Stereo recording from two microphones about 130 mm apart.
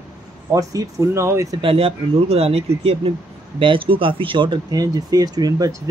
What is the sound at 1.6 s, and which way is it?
Speech, 45° right (ahead or behind).